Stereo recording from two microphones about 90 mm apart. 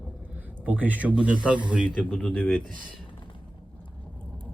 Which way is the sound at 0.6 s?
20° right (ahead or behind).